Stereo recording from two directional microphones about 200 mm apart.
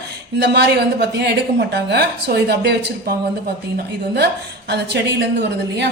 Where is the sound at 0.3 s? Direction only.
60° right (ahead or behind).